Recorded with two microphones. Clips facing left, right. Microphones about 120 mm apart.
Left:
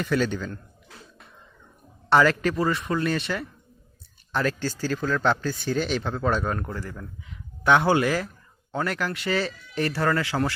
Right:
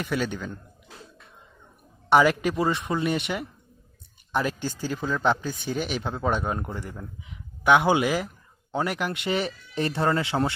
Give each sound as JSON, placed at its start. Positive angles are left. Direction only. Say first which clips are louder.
{"t": 0.0, "sound": "speech", "louder": "left 3 dB", "side_deg": -10}
{"t": 2.0, "sound": "speech", "louder": "even", "side_deg": -15}